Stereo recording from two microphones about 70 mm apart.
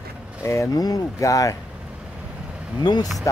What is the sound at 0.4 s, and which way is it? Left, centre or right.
Speech, left.